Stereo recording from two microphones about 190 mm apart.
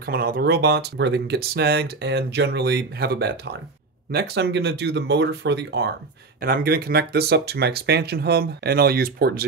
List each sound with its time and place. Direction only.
0.0 s speech: 55° right (ahead or behind)
6.4 s speech: 55° right (ahead or behind)